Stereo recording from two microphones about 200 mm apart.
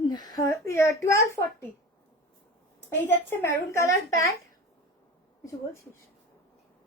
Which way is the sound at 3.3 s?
15° left (ahead or behind).